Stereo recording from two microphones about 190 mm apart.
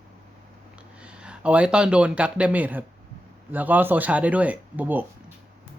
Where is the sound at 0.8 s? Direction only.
5° right (ahead or behind).